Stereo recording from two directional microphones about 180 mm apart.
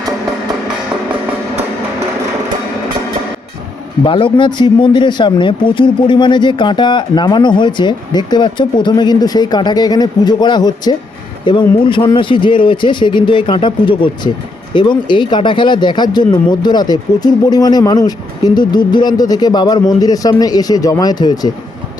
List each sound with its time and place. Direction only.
4.0 s speech: 30° left (ahead or behind)